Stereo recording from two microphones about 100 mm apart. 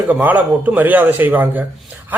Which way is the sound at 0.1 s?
15° right (ahead or behind).